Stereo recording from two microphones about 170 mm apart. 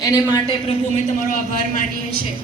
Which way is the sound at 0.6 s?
40° left (ahead or behind).